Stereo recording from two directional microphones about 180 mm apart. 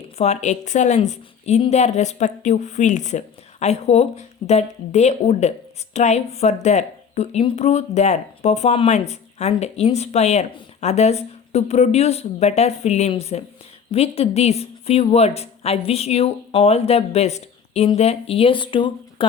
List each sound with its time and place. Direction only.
0.2 s a woman's voice: 40° left (ahead or behind)